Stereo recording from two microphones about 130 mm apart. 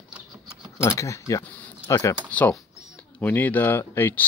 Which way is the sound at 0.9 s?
25° left (ahead or behind).